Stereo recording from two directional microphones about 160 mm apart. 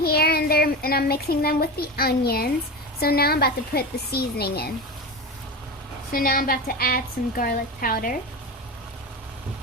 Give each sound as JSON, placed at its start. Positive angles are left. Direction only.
{"t": 0.0, "sound": "a child's voice", "side_deg": 75}
{"t": 6.1, "sound": "a woman's voice", "side_deg": 65}